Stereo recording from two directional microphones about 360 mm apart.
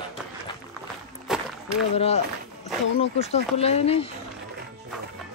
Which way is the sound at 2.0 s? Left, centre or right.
Centre.